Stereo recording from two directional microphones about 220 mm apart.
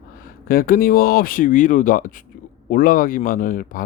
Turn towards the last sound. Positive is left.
turn(degrees=40)  # may be behind; listen again after turning